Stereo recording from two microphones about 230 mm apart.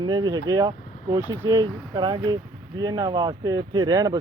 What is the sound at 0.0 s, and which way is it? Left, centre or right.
Speech, centre.